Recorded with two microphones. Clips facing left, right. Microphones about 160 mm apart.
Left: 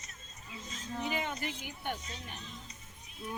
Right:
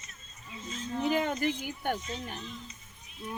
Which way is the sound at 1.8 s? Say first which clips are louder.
Right 4 dB; 45° right (ahead or behind).